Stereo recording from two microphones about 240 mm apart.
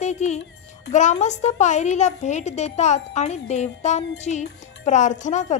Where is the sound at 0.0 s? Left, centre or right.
Left.